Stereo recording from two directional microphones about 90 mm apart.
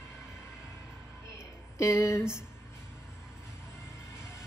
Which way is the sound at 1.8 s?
35° left (ahead or behind).